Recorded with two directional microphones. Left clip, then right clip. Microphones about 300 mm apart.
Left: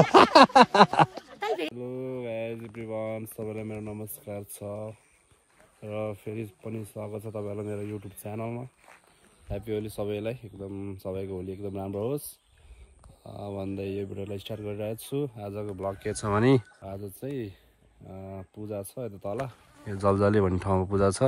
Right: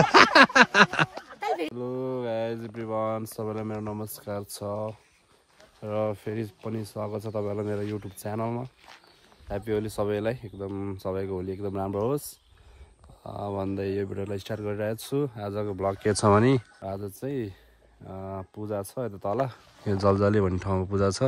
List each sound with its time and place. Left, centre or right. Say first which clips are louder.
0.4 s speech: left 1 dB; centre
1.6 s a sound: right 2 dB; centre
2.7 s speech: right 4 dB; centre
7.3 s speech: right 5 dB; right
8.0 s speech: right 5 dB; centre
10.6 s speech: right 4 dB; right
11.0 s speech: right 3 dB; centre
13.2 s speech: right 5 dB; centre
15.5 s speech: right 5 dB; right
16.3 s speech: right 2 dB; centre